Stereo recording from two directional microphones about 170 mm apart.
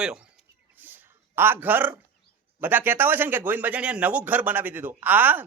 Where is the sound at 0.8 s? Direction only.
10° right (ahead or behind).